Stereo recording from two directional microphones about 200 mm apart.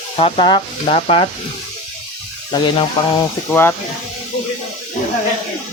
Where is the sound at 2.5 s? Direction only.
20° left (ahead or behind).